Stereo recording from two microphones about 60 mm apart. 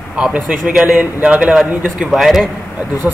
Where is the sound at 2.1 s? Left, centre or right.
Centre.